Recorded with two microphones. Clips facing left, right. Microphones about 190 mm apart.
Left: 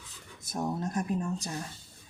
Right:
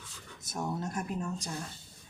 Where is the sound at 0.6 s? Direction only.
25° left (ahead or behind).